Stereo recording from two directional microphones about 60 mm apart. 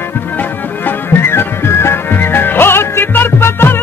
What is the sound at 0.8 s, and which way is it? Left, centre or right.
Music, left.